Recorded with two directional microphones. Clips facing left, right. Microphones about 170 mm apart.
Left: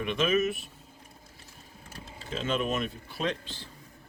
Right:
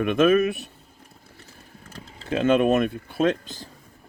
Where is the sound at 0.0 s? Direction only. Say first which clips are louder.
Right 8 dB; 50° right (ahead or behind).